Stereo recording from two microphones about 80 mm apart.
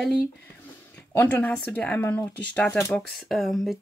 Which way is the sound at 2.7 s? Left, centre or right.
Left.